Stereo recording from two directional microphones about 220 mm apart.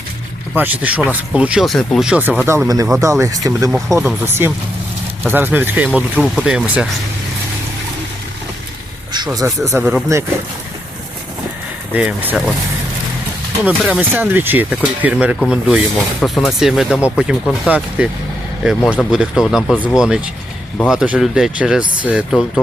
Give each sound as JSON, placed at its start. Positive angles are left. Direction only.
{"t": 0.5, "sound": "speech", "side_deg": -10}
{"t": 9.1, "sound": "speech", "side_deg": -20}
{"t": 11.9, "sound": "speech", "side_deg": -5}
{"t": 13.7, "sound": "speech", "side_deg": -5}